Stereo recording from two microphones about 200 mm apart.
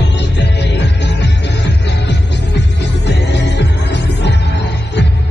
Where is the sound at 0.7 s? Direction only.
60° left (ahead or behind).